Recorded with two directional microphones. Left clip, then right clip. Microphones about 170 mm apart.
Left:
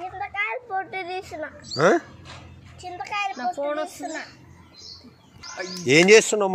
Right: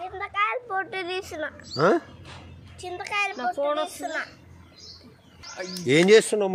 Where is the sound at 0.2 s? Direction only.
15° right (ahead or behind).